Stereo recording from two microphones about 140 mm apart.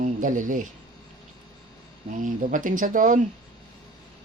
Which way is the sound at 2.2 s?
70° right (ahead or behind).